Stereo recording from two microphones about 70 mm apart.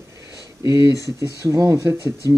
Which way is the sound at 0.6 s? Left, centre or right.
Left.